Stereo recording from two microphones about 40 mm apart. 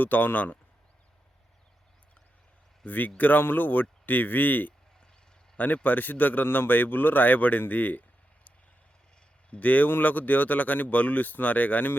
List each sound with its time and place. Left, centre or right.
0.0 s a man's voice: left
2.8 s a man's voice: left
9.6 s a man's voice: left